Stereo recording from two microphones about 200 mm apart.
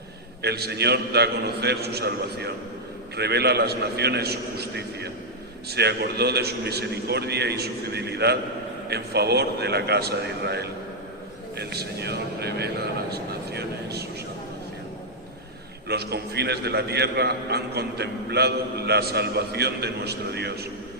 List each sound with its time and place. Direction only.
0.4 s a man's voice: 55° right (ahead or behind)
15.9 s a man's voice: 55° right (ahead or behind)